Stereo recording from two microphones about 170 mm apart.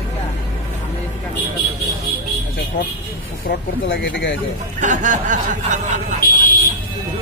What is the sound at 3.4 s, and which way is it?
Speech, 60° left (ahead or behind).